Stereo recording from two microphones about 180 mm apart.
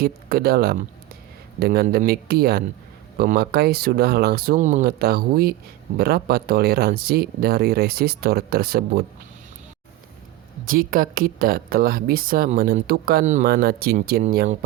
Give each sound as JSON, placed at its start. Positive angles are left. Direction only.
{"t": 0.0, "sound": "speech", "side_deg": -60}
{"t": 10.7, "sound": "speech", "side_deg": -50}